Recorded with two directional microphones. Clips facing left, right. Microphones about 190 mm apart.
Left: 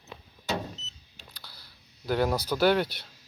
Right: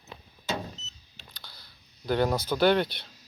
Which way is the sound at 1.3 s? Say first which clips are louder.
Right 2 dB; 5° left (ahead or behind).